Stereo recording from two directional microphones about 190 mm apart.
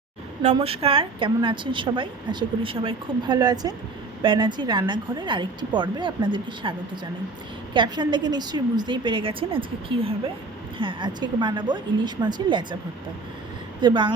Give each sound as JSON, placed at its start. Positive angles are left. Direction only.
{"t": 0.5, "sound": "a woman's voice", "side_deg": -30}
{"t": 13.8, "sound": "a woman's voice", "side_deg": -25}